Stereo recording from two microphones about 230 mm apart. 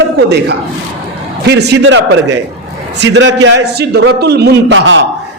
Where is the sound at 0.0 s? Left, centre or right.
Right.